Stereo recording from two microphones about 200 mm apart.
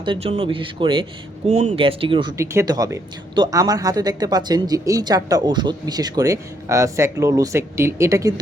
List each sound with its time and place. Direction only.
0.0 s speech: 25° right (ahead or behind)
1.5 s speech: 35° right (ahead or behind)
2.4 s speech: 15° right (ahead or behind)